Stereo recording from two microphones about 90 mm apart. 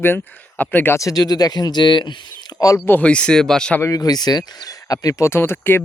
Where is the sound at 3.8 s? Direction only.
40° left (ahead or behind).